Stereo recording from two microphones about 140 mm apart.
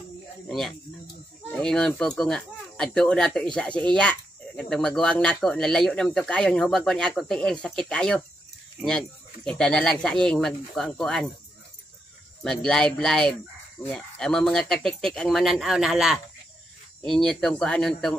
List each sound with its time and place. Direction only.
0.5 s speech: centre (ahead or behind)
12.4 s speech: 5° left (ahead or behind)